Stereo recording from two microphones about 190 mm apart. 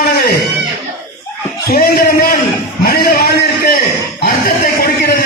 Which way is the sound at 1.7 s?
55° left (ahead or behind).